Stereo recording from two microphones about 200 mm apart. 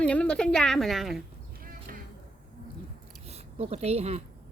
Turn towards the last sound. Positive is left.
turn(degrees=-30)  # may be behind; listen again after turning